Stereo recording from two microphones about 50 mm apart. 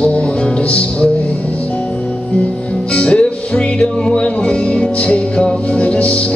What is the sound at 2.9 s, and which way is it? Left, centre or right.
Music, left.